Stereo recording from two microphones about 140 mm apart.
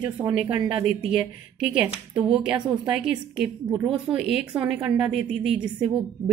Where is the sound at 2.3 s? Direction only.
5° right (ahead or behind).